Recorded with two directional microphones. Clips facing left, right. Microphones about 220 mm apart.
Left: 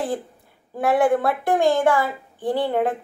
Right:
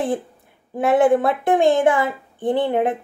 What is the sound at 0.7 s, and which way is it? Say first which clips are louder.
A woman's voice: right 3 dB; 20° right (ahead or behind).